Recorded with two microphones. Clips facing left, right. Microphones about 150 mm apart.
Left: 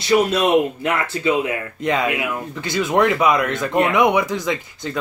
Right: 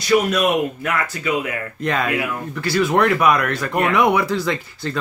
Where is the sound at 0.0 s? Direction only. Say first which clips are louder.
Even; 25° left (ahead or behind).